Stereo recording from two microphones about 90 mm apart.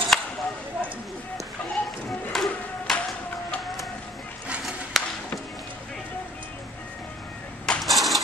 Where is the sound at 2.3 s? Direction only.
5° left (ahead or behind).